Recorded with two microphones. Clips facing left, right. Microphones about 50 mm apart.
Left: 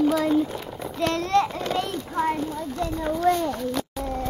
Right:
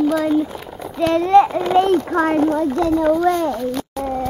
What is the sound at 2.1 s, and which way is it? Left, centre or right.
A child's voice, right.